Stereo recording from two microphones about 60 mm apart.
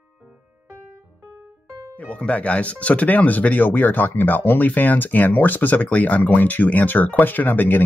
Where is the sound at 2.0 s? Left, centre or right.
Left.